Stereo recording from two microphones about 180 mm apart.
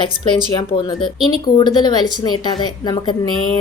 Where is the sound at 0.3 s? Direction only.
25° left (ahead or behind).